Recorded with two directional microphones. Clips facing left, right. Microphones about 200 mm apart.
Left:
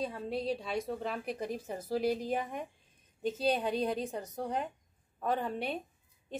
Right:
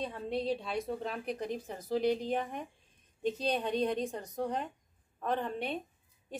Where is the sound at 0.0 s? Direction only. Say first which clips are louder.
Even; centre (ahead or behind).